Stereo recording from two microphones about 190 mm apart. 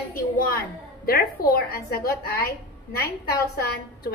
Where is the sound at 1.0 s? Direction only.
50° left (ahead or behind).